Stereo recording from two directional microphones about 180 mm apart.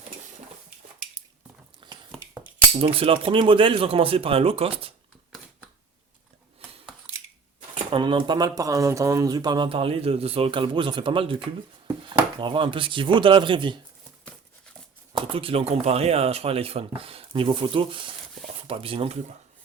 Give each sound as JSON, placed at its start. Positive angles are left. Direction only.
{"t": 1.8, "sound": "a sound", "side_deg": -25}
{"t": 2.7, "sound": "speech", "side_deg": -30}
{"t": 7.1, "sound": "scissors", "side_deg": -35}
{"t": 7.9, "sound": "speech", "side_deg": -25}
{"t": 15.1, "sound": "speech", "side_deg": -30}